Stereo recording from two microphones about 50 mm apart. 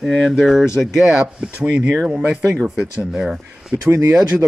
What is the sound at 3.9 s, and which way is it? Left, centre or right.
Speech, right.